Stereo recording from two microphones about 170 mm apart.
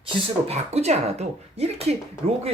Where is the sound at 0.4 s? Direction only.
40° right (ahead or behind).